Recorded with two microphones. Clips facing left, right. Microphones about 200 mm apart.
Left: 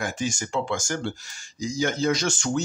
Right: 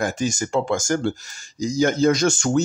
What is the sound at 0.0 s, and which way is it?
Speech, 40° right (ahead or behind).